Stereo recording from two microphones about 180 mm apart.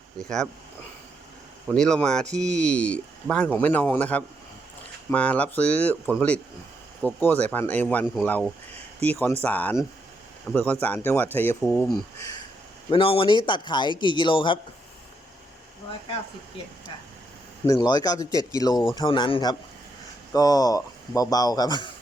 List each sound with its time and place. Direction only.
0.2 s speech: 5° left (ahead or behind)
1.6 s speech: 5° left (ahead or behind)
12.9 s a man's voice: 30° left (ahead or behind)
17.7 s a man's voice: 20° left (ahead or behind)